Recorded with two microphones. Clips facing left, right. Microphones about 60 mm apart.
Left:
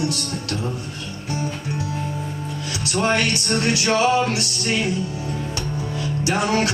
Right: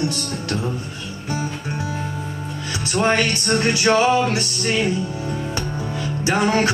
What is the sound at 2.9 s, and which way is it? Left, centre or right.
Music, right.